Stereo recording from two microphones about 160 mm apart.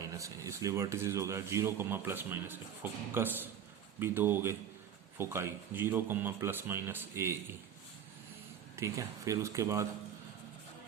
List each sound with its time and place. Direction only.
0.0 s a man's voice: 20° right (ahead or behind)
8.7 s speech: 20° right (ahead or behind)